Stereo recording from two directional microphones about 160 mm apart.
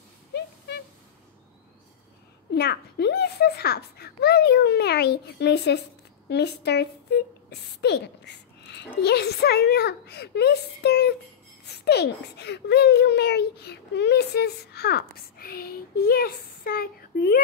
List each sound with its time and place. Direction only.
2.5 s a child's voice: 90° left; by 17.4 s 75° left (ahead or behind)